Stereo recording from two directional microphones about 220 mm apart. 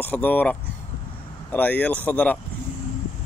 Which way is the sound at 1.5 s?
5° left (ahead or behind).